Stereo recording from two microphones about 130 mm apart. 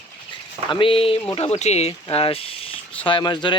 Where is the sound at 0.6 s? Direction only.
40° left (ahead or behind).